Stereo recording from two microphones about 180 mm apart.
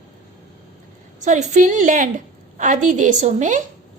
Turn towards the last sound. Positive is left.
turn(degrees=-40)  # may be behind; listen again after turning